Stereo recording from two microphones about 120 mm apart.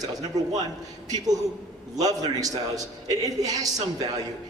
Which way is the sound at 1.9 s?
30° right (ahead or behind).